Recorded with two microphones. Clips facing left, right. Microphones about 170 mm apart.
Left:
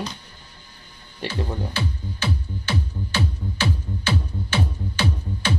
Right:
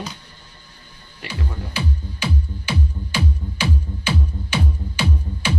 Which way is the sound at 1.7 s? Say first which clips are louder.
Right 1 dB; 10° right (ahead or behind).